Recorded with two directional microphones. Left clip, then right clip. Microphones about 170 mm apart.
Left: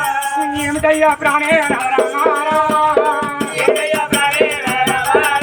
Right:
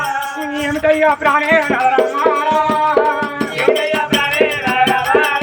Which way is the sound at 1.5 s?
30° left (ahead or behind).